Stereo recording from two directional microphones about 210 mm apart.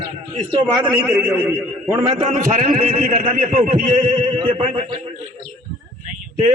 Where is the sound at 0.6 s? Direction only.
5° right (ahead or behind).